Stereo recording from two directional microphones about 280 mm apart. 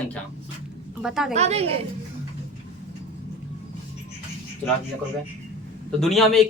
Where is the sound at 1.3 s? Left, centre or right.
Right.